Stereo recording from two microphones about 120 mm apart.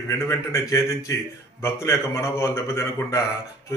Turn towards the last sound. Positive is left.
turn(degrees=20)  # may be behind; listen again after turning